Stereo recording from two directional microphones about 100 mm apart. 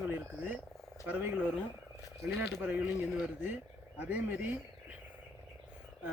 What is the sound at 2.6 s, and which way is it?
Speech, 10° right (ahead or behind).